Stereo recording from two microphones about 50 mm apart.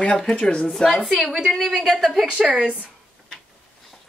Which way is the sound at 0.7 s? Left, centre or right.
Centre.